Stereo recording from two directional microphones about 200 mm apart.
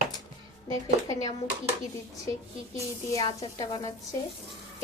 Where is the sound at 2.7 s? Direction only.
15° left (ahead or behind).